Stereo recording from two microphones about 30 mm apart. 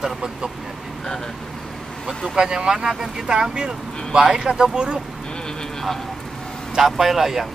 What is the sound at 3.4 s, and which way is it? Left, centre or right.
Speech, right.